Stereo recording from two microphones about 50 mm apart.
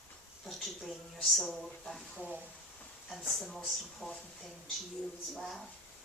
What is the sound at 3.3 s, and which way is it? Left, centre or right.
Speech, centre.